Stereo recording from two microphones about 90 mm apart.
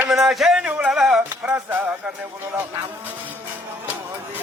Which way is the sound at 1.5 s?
20° right (ahead or behind).